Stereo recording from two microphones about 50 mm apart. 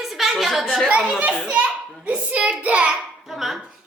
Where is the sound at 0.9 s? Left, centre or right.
Right.